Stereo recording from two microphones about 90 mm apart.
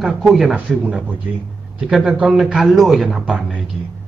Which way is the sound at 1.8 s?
Centre (ahead or behind).